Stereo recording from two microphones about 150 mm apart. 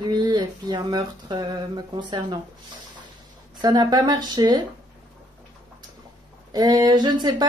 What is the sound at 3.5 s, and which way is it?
Speech, 25° right (ahead or behind).